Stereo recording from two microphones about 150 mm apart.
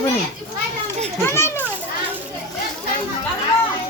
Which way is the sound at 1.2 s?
15° left (ahead or behind).